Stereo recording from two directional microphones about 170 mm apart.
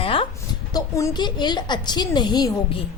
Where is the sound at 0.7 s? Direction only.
20° left (ahead or behind).